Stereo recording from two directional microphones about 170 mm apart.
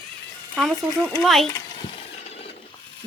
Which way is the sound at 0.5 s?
5° left (ahead or behind).